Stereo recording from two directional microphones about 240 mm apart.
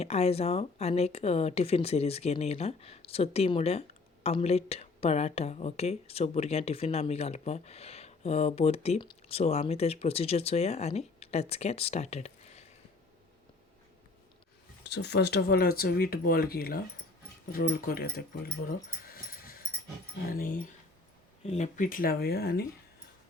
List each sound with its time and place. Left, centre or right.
0.0 s a woman's voice: left
14.8 s speech: left
18.7 s a sound: left
20.3 s speech: left